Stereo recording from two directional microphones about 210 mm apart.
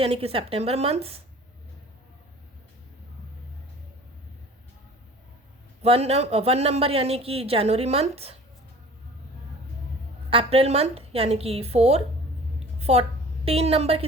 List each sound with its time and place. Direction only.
0.0 s speech: 30° right (ahead or behind)
5.8 s speech: 30° right (ahead or behind)
10.2 s a woman's voice: 25° right (ahead or behind)